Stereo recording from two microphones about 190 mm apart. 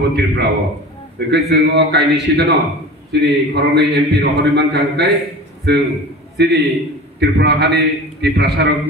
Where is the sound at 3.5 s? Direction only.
65° right (ahead or behind).